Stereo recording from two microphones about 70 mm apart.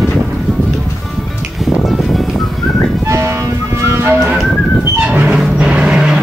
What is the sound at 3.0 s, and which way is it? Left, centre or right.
Music, right.